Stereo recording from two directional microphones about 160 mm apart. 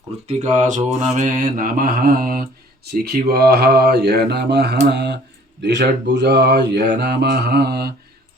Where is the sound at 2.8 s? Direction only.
80° right.